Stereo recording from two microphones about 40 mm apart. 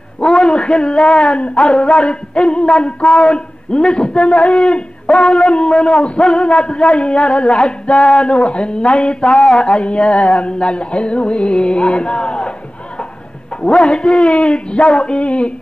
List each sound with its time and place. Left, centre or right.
0.2 s a sound: centre
1.0 s a man's voice: left
13.6 s a man's voice: left
13.8 s a man's voice: centre
14.3 s a man's voice: left